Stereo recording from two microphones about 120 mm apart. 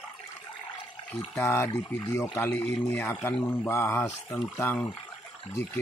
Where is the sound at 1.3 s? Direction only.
20° left (ahead or behind).